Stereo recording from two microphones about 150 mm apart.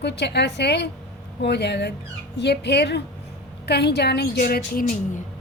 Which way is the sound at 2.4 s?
90° left.